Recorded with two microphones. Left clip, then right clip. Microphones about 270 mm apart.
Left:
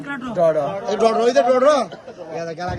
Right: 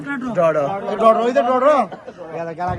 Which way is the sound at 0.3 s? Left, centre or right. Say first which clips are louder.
Right 1 dB; right.